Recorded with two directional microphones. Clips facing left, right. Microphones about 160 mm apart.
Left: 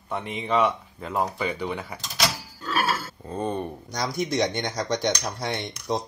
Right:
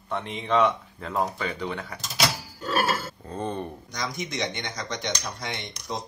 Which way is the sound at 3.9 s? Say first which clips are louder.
Left 6 dB; 35° left (ahead or behind).